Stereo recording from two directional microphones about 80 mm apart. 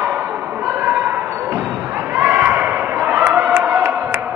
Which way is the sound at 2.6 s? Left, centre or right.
Centre.